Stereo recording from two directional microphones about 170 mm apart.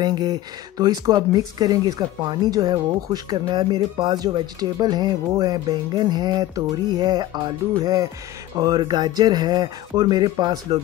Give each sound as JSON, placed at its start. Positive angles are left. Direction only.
{"t": 0.0, "sound": "speech", "side_deg": -25}